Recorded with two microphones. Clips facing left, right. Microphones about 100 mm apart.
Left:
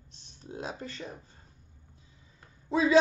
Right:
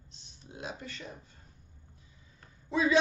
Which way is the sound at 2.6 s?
30° left (ahead or behind).